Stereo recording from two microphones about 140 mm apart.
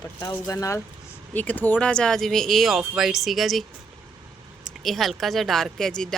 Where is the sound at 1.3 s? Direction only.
10° left (ahead or behind).